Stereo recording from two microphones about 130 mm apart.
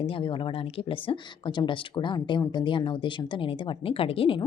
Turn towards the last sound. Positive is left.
turn(degrees=45)  # may be behind; listen again after turning